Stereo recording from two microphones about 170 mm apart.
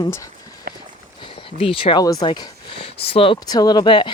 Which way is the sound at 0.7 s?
65° right (ahead or behind).